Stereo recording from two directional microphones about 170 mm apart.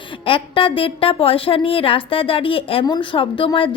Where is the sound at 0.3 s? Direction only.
30° left (ahead or behind).